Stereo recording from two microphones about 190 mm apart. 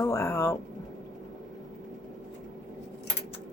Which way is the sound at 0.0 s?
15° left (ahead or behind).